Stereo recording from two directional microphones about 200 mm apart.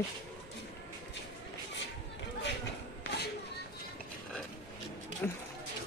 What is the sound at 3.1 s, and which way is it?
Children playing, 60° left (ahead or behind).